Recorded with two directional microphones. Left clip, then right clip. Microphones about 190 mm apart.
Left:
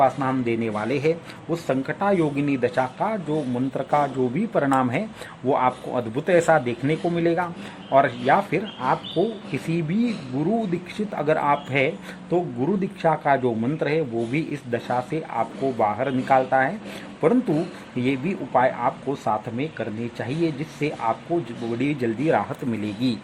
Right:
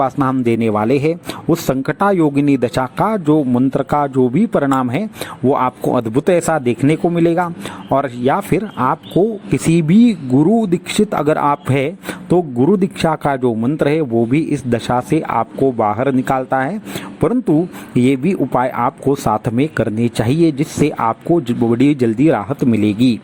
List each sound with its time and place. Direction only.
0.0 s speech: 40° right (ahead or behind)
18.0 s speech: 40° right (ahead or behind)